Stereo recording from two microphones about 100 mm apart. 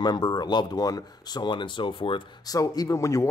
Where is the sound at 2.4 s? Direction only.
40° left (ahead or behind).